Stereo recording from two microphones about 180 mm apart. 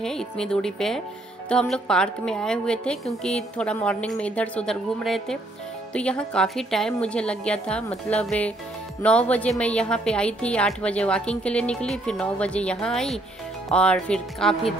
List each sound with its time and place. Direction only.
0.0 s a woman's voice: 5° left (ahead or behind)